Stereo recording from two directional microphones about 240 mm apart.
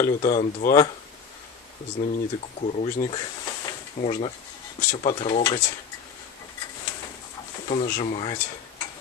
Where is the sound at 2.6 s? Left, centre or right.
Left.